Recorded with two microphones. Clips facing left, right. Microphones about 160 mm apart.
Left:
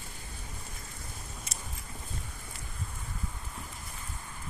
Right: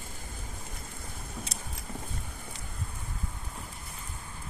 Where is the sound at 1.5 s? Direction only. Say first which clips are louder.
Right 2 dB; 35° right (ahead or behind).